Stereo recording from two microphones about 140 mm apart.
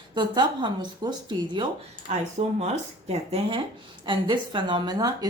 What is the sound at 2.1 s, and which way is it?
Speech, 55° right (ahead or behind).